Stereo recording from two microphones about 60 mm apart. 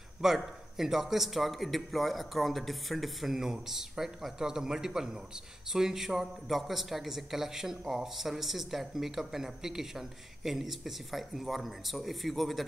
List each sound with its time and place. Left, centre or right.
0.2 s speech: centre